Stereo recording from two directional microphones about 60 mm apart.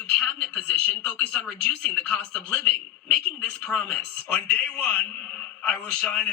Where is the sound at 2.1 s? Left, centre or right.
Centre.